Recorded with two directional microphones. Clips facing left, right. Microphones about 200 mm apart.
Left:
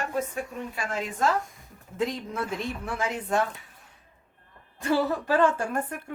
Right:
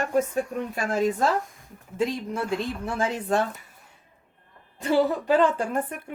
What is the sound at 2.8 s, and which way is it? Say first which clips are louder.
Speech: right 3 dB; 30° right (ahead or behind).